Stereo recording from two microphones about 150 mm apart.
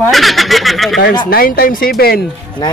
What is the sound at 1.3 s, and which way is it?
Speech, 75° left (ahead or behind).